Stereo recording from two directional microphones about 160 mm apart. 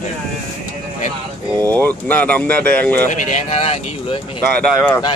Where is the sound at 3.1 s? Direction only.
45° left (ahead or behind).